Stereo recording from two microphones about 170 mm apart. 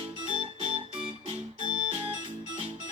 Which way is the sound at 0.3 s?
35° right (ahead or behind).